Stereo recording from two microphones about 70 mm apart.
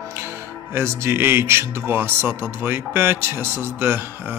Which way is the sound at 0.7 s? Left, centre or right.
Right.